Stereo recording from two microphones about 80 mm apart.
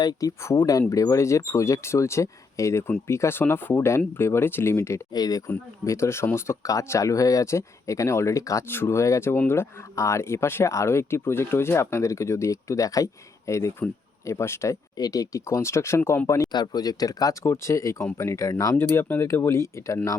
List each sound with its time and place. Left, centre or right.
0.0 s speech: left
5.1 s speech: left
5.8 s speech: left
14.9 s speech: left
16.5 s speech: left
17.4 s speech: left